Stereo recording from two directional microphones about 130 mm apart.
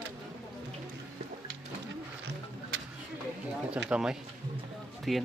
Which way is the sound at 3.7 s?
5° right (ahead or behind).